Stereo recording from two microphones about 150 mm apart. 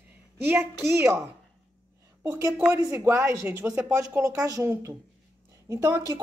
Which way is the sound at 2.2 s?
20° right (ahead or behind).